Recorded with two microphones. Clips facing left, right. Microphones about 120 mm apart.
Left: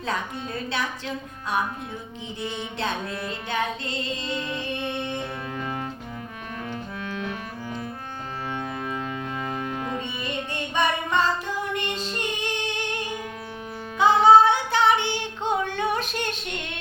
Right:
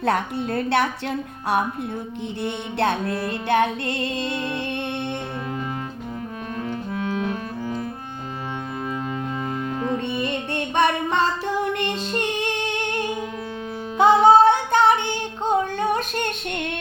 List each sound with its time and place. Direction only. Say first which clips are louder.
0.0 s a woman's voice: right 7 dB; 65° right (ahead or behind)
2.4 s music: right 6 dB; 65° right (ahead or behind)
6.6 s music: right 6 dB; 30° right (ahead or behind)
10.2 s music: right 5 dB; 60° right (ahead or behind)
14.0 s singing: right 2 dB; 50° right (ahead or behind)